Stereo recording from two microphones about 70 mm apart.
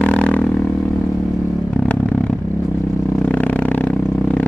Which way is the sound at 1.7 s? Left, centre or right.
Left.